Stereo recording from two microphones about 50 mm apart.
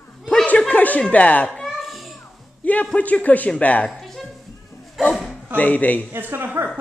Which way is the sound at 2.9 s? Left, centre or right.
Left.